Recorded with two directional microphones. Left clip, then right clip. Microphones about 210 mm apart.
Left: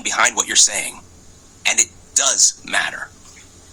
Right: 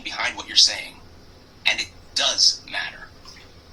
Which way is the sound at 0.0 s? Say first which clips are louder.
Left 9 dB; 50° left (ahead or behind).